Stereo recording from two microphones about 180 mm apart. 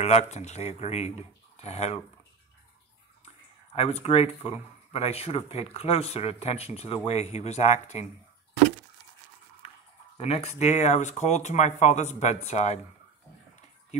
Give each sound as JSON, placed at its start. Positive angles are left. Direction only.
{"t": 0.0, "sound": "speech", "side_deg": 40}
{"t": 3.7, "sound": "speech", "side_deg": 35}
{"t": 10.1, "sound": "speech", "side_deg": 35}